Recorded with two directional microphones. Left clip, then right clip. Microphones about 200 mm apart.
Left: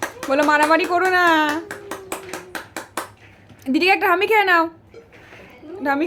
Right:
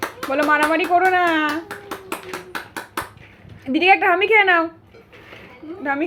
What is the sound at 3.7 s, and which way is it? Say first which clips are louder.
Speech: right 2 dB; 15° left (ahead or behind).